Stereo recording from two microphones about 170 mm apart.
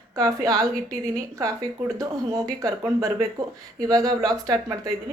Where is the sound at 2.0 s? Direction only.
20° right (ahead or behind).